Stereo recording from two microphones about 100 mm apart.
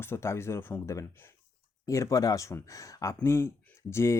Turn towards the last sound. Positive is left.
turn(degrees=25)  # may be behind; listen again after turning